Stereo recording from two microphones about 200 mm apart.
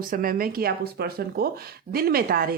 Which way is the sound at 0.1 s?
45° right (ahead or behind).